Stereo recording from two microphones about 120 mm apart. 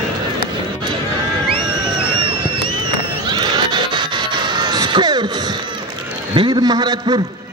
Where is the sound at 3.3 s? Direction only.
40° right (ahead or behind).